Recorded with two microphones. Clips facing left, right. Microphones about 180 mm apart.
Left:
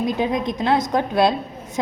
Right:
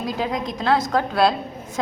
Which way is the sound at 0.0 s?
20° left (ahead or behind).